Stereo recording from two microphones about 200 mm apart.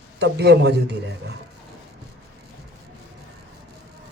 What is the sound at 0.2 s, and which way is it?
Speech, 55° right (ahead or behind).